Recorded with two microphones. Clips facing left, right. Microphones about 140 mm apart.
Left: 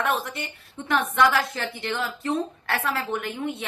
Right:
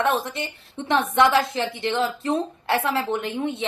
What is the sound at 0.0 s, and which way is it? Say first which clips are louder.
A woman's voice: right 3 dB; 25° right (ahead or behind).